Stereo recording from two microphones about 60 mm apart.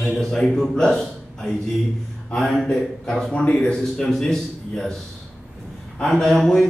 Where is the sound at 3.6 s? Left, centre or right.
Centre.